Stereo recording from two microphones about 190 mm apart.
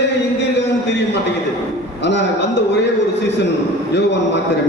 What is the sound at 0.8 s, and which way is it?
Speech, 65° left (ahead or behind).